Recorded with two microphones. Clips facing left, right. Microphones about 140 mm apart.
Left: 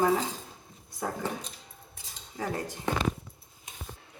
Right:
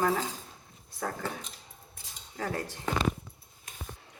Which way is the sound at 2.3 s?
15° left (ahead or behind).